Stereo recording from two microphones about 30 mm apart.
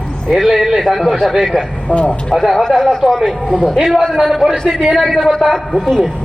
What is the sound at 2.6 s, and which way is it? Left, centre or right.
Speech, left.